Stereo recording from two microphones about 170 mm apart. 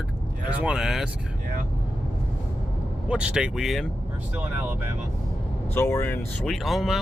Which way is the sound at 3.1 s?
5° right (ahead or behind).